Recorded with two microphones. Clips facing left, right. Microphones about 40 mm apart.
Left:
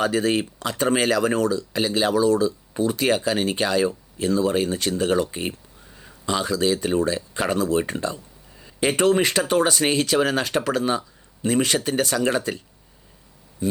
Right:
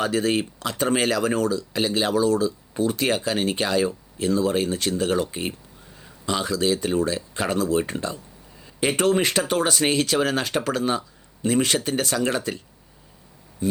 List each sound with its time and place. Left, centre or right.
0.0 s speech: left
6.2 s speech: left